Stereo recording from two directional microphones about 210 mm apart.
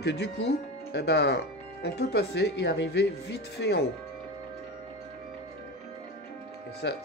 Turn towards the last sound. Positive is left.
turn(degrees=55)  # may be behind; listen again after turning